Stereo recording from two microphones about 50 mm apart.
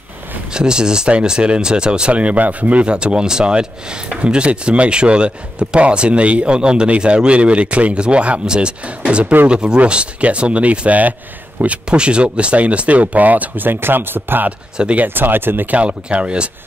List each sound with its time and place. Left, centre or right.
0.5 s speech: centre
2.9 s speech: centre; by 15.7 s right
15.7 s speech: right